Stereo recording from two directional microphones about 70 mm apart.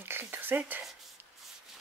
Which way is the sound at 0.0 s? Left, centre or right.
Right.